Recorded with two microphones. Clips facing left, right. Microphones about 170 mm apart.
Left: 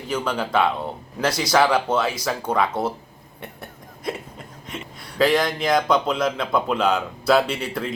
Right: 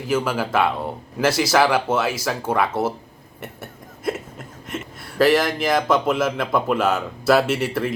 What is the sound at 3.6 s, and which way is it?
Hiccup, 5° right (ahead or behind).